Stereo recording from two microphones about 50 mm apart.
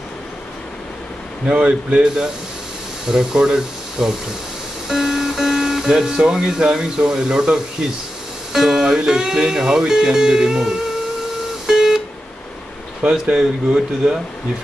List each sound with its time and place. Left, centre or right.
1.5 s speech: right
11.6 s guitar: centre
13.0 s speech: centre